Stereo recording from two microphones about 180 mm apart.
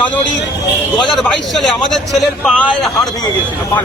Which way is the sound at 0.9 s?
Centre (ahead or behind).